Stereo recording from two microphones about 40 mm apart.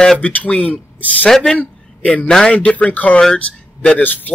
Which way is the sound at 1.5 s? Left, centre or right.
Left.